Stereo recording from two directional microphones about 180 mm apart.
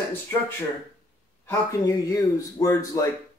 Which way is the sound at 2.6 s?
20° left (ahead or behind).